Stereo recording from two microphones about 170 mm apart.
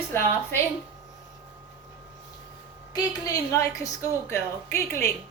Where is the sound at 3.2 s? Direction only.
20° left (ahead or behind).